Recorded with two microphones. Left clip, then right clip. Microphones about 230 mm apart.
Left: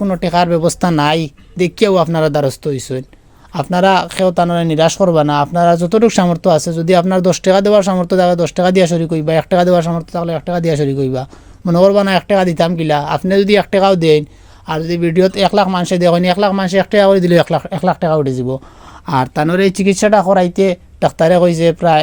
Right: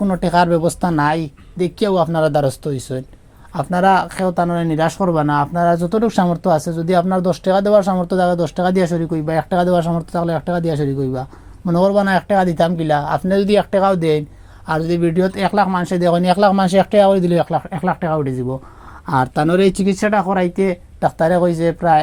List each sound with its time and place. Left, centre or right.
0.0 s speech: left
0.6 s speech: left
10.1 s speech: centre
10.5 s speech: left
14.7 s speech: centre
15.4 s speech: left
16.2 s speech: centre
16.9 s speech: left
17.3 s speech: left
19.0 s speech: left
19.8 s speech: left